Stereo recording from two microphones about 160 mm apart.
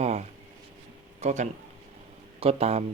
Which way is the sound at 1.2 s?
45° right (ahead or behind).